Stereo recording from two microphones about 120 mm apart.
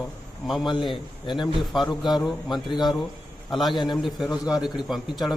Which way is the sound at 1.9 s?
35° left (ahead or behind).